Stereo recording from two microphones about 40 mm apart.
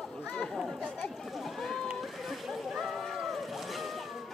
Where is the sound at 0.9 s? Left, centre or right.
Left.